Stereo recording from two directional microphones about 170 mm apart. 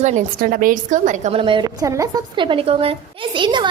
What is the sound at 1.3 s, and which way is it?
A woman's voice, 30° right (ahead or behind).